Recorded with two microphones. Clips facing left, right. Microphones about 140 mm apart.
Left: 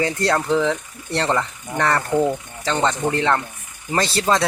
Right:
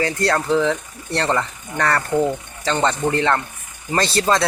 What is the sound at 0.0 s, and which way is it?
Speech, 15° left (ahead or behind).